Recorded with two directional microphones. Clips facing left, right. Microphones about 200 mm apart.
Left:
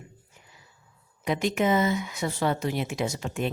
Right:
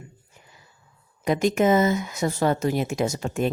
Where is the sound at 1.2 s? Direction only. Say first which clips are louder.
Right 5 dB; 45° right (ahead or behind).